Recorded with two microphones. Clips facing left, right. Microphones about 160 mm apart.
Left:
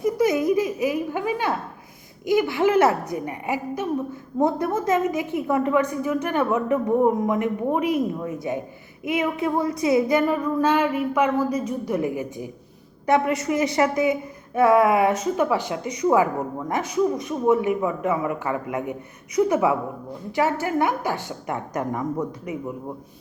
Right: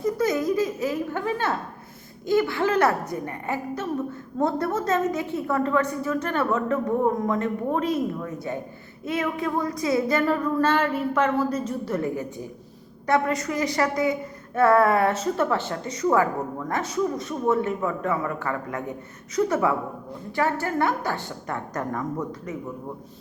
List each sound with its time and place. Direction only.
0.0 s giggle: 20° left (ahead or behind)
2.2 s a woman's voice: 15° left (ahead or behind)